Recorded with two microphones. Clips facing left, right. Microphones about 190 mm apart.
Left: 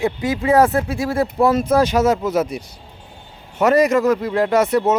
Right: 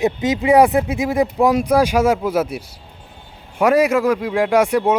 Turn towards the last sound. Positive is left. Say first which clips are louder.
# right 1 dB
turn(degrees=-10)  # may be behind; listen again after turning